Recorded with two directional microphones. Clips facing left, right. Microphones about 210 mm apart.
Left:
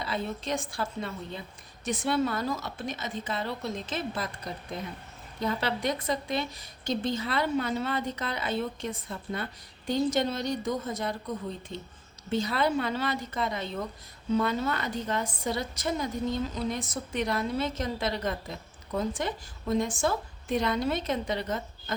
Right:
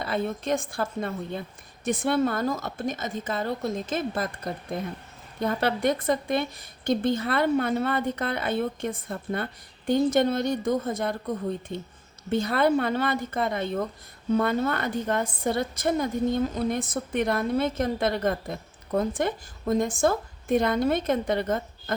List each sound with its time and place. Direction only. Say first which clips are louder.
0.0 s a woman's voice: right 5 dB; 50° right (ahead or behind)